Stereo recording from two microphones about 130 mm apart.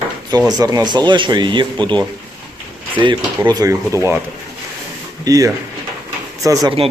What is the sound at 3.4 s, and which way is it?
Speech, 30° right (ahead or behind).